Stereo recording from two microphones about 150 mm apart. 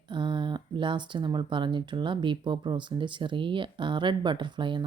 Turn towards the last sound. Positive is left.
turn(degrees=-30)  # may be behind; listen again after turning